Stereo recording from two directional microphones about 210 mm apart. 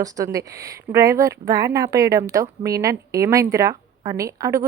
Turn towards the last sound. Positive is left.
turn(degrees=-15)  # may be behind; listen again after turning